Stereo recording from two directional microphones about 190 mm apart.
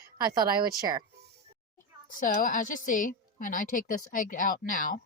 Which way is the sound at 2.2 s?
45° left (ahead or behind).